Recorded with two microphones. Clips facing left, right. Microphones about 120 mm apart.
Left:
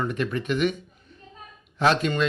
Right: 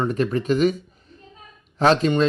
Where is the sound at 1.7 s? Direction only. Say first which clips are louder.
Right 4 dB; 35° right (ahead or behind).